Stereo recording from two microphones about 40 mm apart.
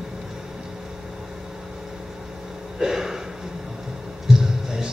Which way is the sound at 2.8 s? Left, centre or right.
Centre.